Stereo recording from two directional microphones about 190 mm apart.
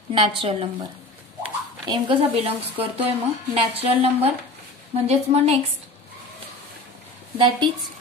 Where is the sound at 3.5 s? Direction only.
30° right (ahead or behind).